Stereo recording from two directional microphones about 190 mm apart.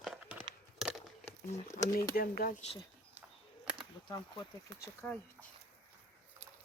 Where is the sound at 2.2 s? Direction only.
50° left (ahead or behind).